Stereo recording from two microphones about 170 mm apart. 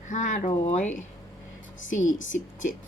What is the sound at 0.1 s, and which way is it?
A woman's voice, 50° left (ahead or behind).